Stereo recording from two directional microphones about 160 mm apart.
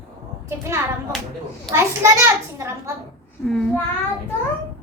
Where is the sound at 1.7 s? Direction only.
20° right (ahead or behind).